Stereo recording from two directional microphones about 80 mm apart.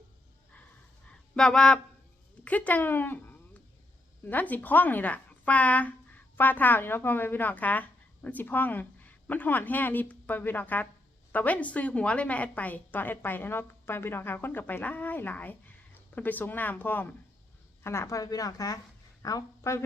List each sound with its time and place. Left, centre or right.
1.1 s a woman's voice: centre
17.8 s a woman's voice: left